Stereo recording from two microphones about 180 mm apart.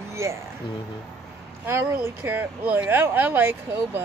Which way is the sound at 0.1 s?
15° right (ahead or behind).